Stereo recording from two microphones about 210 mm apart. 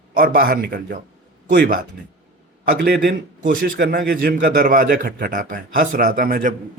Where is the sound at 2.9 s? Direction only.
50° right (ahead or behind).